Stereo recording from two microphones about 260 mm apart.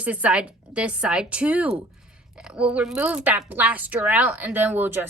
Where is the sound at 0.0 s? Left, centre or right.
Centre.